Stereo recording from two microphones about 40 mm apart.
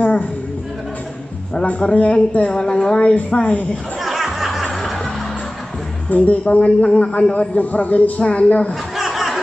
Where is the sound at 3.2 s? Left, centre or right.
Left.